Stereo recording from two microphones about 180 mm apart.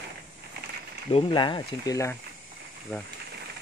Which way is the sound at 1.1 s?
25° left (ahead or behind).